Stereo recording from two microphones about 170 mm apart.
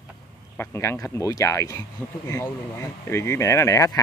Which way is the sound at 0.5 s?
15° left (ahead or behind).